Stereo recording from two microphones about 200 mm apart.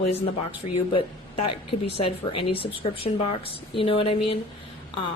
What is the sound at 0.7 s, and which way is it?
Speech, 30° left (ahead or behind).